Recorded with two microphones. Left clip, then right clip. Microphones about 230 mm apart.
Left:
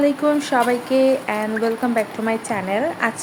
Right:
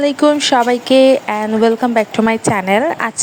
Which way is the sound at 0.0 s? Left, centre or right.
Right.